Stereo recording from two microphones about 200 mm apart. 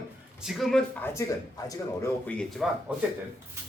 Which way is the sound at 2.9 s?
5° right (ahead or behind).